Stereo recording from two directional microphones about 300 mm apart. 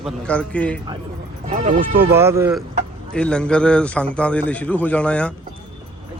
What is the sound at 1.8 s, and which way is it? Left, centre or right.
Speech, centre.